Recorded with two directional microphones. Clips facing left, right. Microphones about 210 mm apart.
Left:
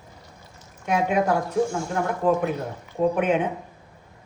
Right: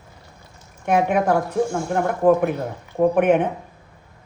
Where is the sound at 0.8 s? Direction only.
55° right (ahead or behind).